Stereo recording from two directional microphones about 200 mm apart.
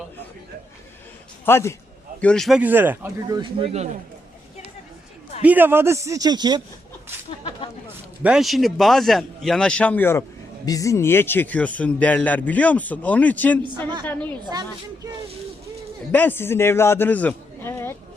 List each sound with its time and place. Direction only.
1.5 s a man's voice: 10° left (ahead or behind); by 3.8 s 30° right (ahead or behind)
5.4 s speech: 10° right (ahead or behind)
7.3 s a sound: 25° left (ahead or behind)
8.2 s a man's voice: 5° right (ahead or behind)
16.1 s a man's voice: 10° left (ahead or behind)